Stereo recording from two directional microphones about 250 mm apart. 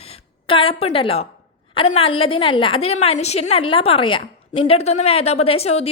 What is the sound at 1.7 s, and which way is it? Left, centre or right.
A woman's voice, left.